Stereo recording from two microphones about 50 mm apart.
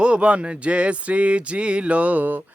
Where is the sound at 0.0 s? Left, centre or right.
Right.